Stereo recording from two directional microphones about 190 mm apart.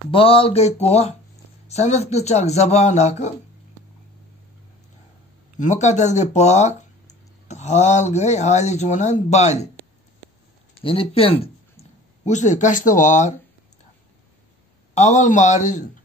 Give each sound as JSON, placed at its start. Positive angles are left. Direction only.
{"t": 0.1, "sound": "speech", "side_deg": 30}
{"t": 5.6, "sound": "speech", "side_deg": 40}
{"t": 10.8, "sound": "speech", "side_deg": 30}
{"t": 15.0, "sound": "speech", "side_deg": 40}